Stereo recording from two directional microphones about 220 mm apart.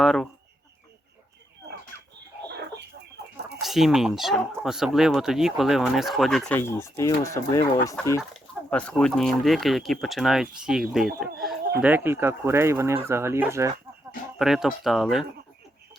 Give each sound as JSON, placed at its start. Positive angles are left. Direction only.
{"t": 0.0, "sound": "speech", "side_deg": 0}
{"t": 3.2, "sound": "chicken", "side_deg": -50}
{"t": 3.6, "sound": "speech", "side_deg": 0}
{"t": 8.2, "sound": "speech", "side_deg": 5}
{"t": 14.3, "sound": "speech", "side_deg": 0}